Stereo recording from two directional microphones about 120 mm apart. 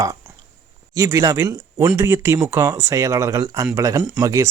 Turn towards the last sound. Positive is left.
turn(degrees=-30)  # may be behind; listen again after turning